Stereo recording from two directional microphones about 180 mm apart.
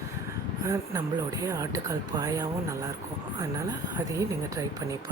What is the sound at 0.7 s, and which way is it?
Speech, 20° right (ahead or behind).